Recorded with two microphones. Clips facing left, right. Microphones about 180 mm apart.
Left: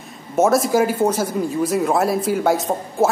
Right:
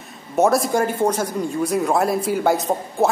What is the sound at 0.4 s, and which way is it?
Speech, centre (ahead or behind).